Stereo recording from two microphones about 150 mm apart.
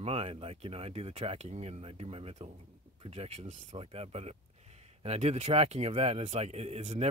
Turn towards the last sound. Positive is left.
turn(degrees=-45)  # may be behind; listen again after turning